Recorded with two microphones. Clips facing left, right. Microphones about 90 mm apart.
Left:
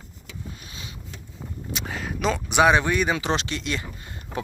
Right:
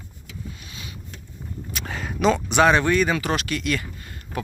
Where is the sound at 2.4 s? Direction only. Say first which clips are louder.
Left 2 dB; 15° left (ahead or behind).